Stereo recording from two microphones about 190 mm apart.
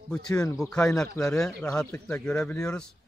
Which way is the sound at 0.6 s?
5° left (ahead or behind).